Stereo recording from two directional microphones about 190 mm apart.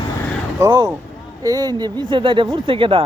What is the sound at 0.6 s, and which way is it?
A man's voice, 20° right (ahead or behind).